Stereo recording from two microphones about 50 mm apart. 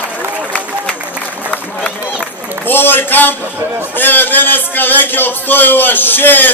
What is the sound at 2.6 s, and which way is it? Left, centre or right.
A man's voice, left.